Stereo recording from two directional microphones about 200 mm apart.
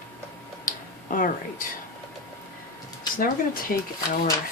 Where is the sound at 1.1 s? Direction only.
45° left (ahead or behind).